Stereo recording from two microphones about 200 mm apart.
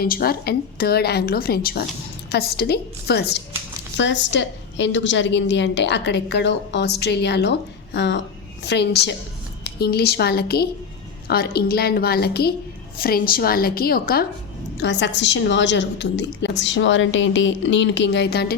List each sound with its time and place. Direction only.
0.0 s a woman's voice: 50° left (ahead or behind)
14.8 s a woman's voice: 60° left (ahead or behind)